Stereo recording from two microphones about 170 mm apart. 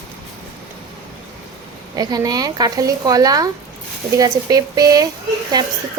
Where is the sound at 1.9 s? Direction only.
25° right (ahead or behind).